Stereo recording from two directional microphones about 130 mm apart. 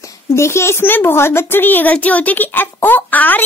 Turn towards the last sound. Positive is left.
turn(degrees=15)  # may be behind; listen again after turning